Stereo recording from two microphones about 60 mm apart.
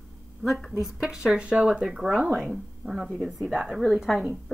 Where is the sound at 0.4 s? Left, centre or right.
Centre.